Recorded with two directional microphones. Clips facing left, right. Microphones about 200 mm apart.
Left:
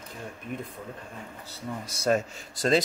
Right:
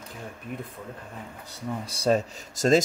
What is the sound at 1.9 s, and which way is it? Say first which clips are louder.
Speech: right 2 dB; 30° right (ahead or behind).